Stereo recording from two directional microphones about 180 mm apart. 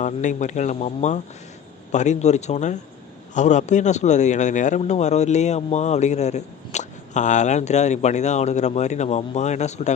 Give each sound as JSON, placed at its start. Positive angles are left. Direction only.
{"t": 0.0, "sound": "speech", "side_deg": 45}